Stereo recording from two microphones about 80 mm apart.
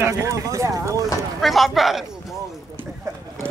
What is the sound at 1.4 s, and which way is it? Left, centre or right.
Speech, centre.